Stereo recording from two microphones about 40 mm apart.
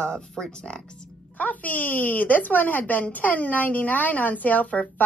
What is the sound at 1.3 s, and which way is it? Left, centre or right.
Speech, left.